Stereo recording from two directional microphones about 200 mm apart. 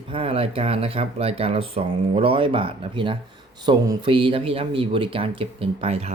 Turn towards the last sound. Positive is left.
turn(degrees=-30)  # may be behind; listen again after turning